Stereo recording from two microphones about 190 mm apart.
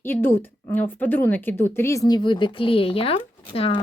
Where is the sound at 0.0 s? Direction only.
10° left (ahead or behind).